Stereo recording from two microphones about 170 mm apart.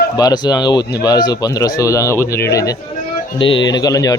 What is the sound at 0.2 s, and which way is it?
A man's voice, 25° left (ahead or behind).